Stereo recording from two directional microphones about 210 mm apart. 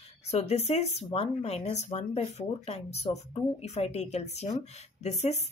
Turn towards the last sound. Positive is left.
turn(degrees=30)  # may be behind; listen again after turning